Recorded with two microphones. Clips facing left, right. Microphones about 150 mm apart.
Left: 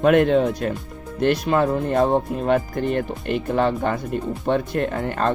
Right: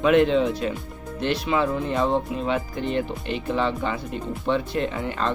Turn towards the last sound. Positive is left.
turn(degrees=50)  # may be behind; listen again after turning